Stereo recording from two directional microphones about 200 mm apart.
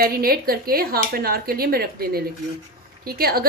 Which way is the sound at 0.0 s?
50° right (ahead or behind).